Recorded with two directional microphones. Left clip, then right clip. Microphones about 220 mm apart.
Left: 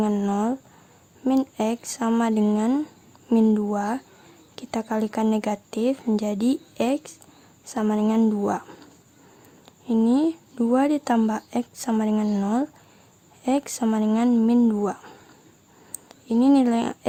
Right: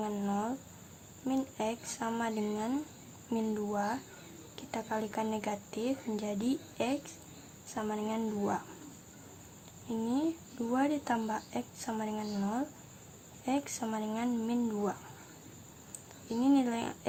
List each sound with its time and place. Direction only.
0.0 s speech: 40° left (ahead or behind)
9.9 s a woman's voice: 40° left (ahead or behind)